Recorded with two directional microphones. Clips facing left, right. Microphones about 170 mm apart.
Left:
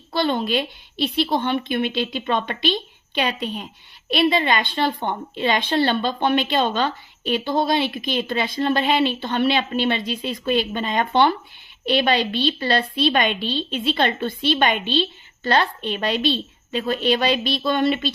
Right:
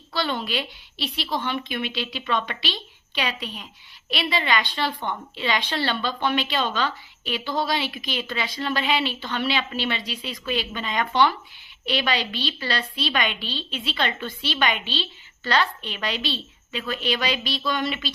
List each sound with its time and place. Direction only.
0.1 s a woman's voice: 50° left (ahead or behind)